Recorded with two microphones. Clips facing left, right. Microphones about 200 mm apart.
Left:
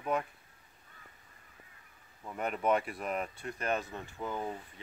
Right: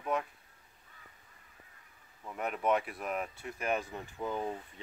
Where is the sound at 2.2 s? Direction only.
Centre (ahead or behind).